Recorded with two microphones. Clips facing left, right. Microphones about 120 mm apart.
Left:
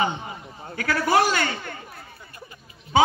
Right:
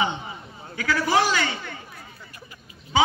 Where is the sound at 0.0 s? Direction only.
45° left (ahead or behind).